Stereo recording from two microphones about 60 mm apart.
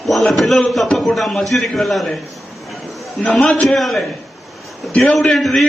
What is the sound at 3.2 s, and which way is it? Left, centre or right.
Speech, left.